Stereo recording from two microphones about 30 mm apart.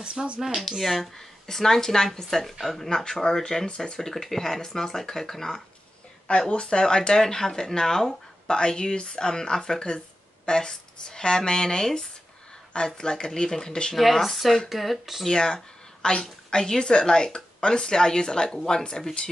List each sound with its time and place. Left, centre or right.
0.0 s speech: right
0.6 s speech: centre
1.1 s speech: centre
2.2 s a woman's voice: centre; by 4.0 s left
4.0 s speech: centre
6.5 s a woman's voice: left; by 8.2 s centre
8.5 s a woman's voice: left
13.9 s speech: centre
15.2 s a woman's voice: left